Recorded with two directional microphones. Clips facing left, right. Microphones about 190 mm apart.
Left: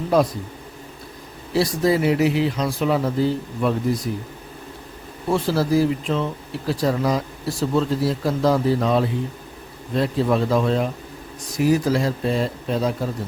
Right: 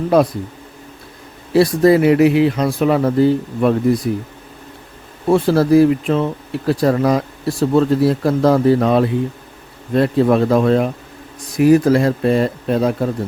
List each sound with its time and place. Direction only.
0.1 s speech: 60° right (ahead or behind)
1.5 s speech: 60° right (ahead or behind)
5.3 s speech: 60° right (ahead or behind)